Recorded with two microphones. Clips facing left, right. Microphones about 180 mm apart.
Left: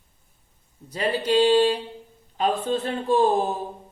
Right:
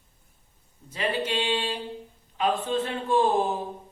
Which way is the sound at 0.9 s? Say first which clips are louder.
Left 6 dB; 35° left (ahead or behind).